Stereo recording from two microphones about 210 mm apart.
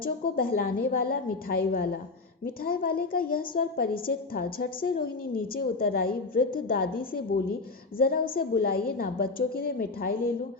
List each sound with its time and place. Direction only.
0.0 s a woman's voice: 45° left (ahead or behind)